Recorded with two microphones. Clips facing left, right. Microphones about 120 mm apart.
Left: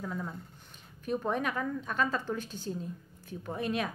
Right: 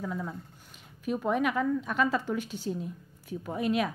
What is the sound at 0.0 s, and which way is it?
A woman's voice, centre (ahead or behind).